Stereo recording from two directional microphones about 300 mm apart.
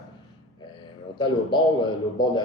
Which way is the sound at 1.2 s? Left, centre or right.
Centre.